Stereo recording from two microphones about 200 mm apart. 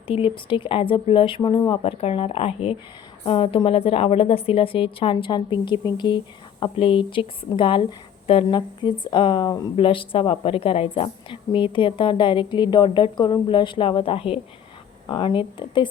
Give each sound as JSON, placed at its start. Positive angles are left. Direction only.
{"t": 0.1, "sound": "a woman's voice", "side_deg": 25}